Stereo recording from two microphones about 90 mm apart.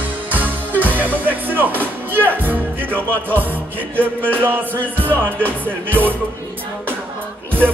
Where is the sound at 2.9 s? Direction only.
20° left (ahead or behind).